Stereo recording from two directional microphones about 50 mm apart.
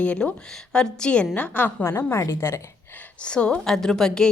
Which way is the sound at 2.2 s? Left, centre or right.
Left.